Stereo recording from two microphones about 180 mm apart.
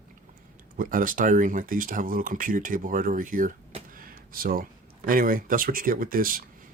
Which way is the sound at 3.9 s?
55° right (ahead or behind).